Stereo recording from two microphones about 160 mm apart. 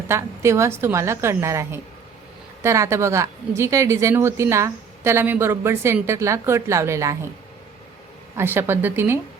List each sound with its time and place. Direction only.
0.1 s a woman's voice: 15° right (ahead or behind)
8.4 s a woman's voice: 15° right (ahead or behind)